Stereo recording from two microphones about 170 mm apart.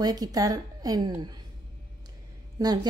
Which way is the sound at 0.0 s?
20° right (ahead or behind).